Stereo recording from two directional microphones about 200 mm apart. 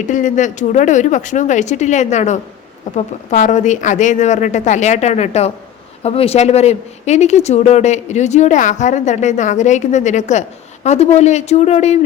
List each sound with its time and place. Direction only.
0.1 s speech: 40° left (ahead or behind)